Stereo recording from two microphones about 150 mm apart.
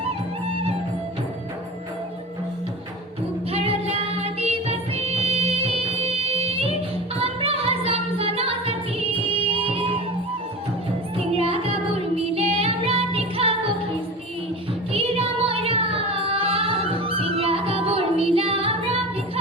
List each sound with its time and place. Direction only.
3.5 s music: 40° right (ahead or behind)
11.3 s music: 40° right (ahead or behind)
14.9 s music: 40° right (ahead or behind)